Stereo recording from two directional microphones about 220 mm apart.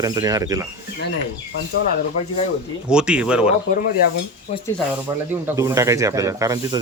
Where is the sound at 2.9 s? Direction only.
5° right (ahead or behind).